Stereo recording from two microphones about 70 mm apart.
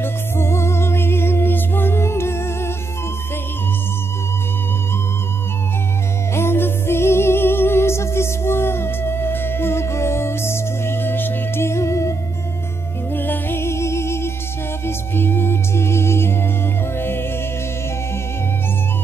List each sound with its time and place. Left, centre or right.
0.0 s music: left
6.3 s music: left
13.1 s music: left